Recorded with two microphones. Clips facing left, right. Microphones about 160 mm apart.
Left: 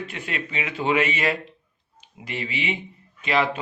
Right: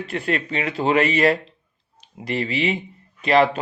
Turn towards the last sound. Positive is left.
turn(degrees=-40)  # may be behind; listen again after turning